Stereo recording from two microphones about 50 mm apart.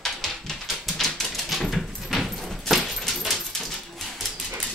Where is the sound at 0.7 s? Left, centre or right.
Centre.